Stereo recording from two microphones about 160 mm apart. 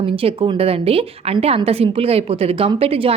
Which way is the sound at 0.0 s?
35° right (ahead or behind).